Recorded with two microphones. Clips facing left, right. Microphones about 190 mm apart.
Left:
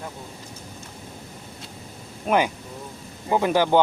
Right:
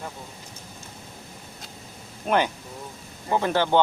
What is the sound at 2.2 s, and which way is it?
Speech, 10° left (ahead or behind).